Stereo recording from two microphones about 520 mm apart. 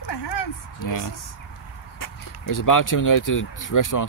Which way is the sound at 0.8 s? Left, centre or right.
Left.